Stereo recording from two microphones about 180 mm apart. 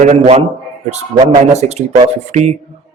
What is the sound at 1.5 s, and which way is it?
A man's voice, 35° right (ahead or behind).